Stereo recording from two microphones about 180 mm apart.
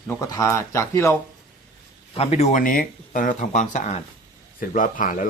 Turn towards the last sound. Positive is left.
turn(degrees=45)  # may be behind; listen again after turning